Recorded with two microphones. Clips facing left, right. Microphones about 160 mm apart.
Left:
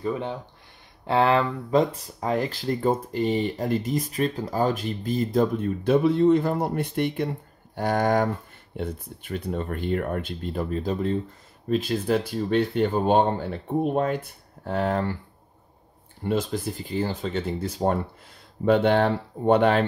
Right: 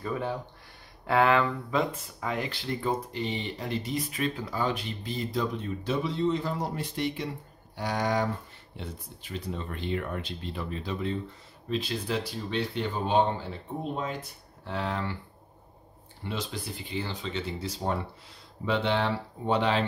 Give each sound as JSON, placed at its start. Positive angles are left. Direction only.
{"t": 0.0, "sound": "speech", "side_deg": 20}
{"t": 14.6, "sound": "speech", "side_deg": 45}
{"t": 16.3, "sound": "speech", "side_deg": 45}